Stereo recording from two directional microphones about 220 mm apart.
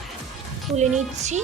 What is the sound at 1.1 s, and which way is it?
Speech, 30° right (ahead or behind).